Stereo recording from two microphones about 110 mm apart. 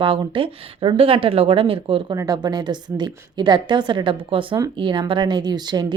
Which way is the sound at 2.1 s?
35° right (ahead or behind).